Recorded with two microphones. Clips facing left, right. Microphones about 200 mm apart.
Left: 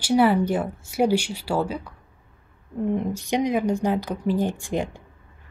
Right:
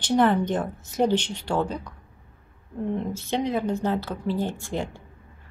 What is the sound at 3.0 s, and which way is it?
A woman's voice, 15° left (ahead or behind).